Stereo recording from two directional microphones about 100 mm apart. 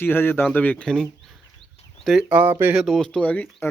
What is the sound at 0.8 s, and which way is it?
Speech, 5° left (ahead or behind).